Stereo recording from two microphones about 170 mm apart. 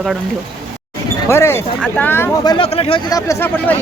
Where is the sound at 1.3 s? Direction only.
15° left (ahead or behind).